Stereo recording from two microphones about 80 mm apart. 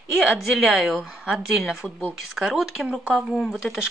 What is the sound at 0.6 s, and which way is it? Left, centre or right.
A woman's voice, centre.